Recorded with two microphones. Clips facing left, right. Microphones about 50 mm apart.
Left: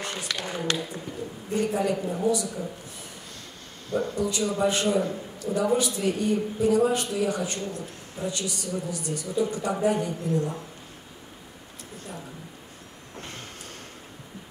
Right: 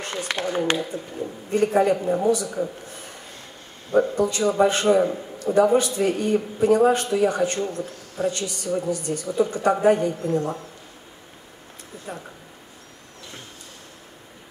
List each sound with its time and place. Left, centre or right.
0.0 s speech: right
1.5 s a man's voice: right
4.2 s a man's voice: right
12.1 s a man's voice: right